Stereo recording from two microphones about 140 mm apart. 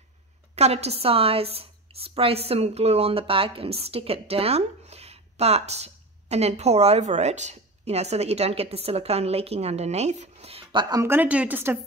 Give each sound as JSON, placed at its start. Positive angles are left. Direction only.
{"t": 0.6, "sound": "a woman's voice", "side_deg": -50}
{"t": 11.0, "sound": "a woman's voice", "side_deg": -15}